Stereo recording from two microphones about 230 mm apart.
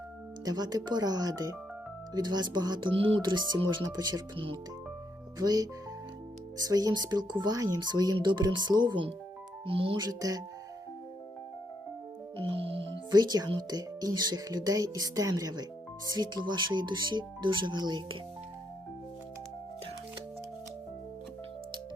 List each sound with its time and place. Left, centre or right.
0.4 s speech: centre
12.4 s speech: right